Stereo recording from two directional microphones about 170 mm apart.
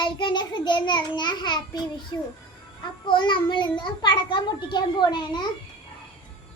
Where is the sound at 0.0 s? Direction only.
25° left (ahead or behind).